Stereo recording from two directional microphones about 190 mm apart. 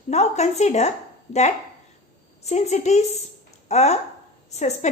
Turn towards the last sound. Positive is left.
turn(degrees=35)  # may be behind; listen again after turning